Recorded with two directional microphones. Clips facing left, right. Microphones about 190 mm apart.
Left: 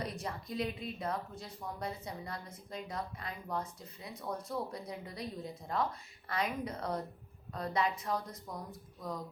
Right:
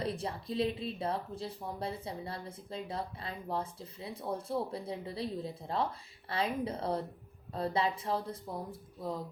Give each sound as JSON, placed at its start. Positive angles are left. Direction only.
{"t": 0.0, "sound": "speech", "side_deg": -30}